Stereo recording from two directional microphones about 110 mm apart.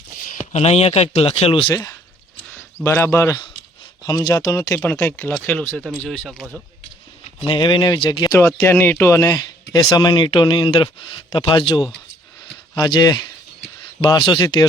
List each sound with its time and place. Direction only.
0.5 s speech: 75° left (ahead or behind)
1.7 s speech: 30° left (ahead or behind)
4.0 s speech: 35° left (ahead or behind)
4.8 s speech: 20° left (ahead or behind); by 6.6 s centre (ahead or behind)
7.4 s speech: 45° left (ahead or behind)
8.5 s speech: 25° left (ahead or behind); by 14.4 s 45° left (ahead or behind)